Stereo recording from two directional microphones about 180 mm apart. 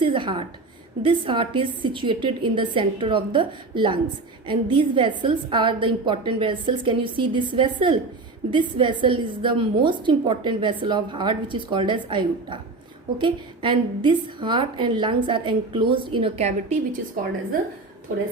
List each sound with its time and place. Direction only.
0.0 s a woman's voice: 30° right (ahead or behind)
17.2 s a woman's voice: 50° right (ahead or behind)